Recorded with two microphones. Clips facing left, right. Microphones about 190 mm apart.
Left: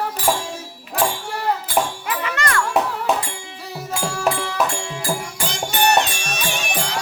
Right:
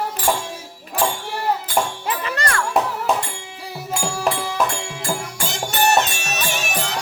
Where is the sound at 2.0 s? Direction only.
35° right (ahead or behind).